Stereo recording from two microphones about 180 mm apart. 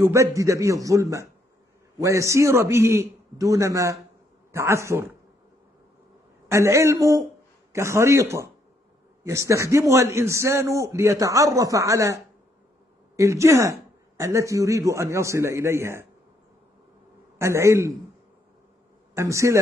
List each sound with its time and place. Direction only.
0.0 s a man's voice: 15° right (ahead or behind)
6.5 s a man's voice: 15° right (ahead or behind)
17.4 s a man's voice: 15° right (ahead or behind)
19.1 s a man's voice: 15° right (ahead or behind)